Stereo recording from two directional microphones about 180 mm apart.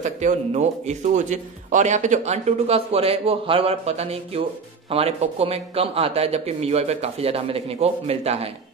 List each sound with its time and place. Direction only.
0.0 s a man's voice: 40° right (ahead or behind)